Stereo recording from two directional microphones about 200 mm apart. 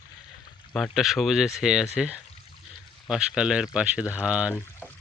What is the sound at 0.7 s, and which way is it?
Speech, centre (ahead or behind).